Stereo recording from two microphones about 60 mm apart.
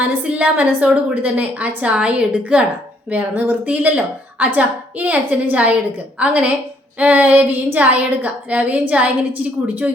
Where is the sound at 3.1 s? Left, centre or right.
Right.